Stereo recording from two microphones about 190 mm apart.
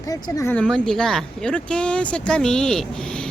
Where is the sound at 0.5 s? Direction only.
5° left (ahead or behind).